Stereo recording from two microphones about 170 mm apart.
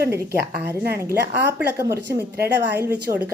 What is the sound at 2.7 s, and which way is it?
Speech, 10° right (ahead or behind).